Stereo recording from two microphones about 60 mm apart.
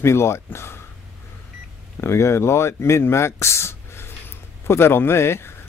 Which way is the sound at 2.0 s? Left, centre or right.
Left.